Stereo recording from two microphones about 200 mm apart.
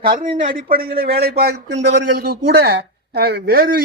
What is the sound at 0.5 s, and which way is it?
Speech, 45° right (ahead or behind).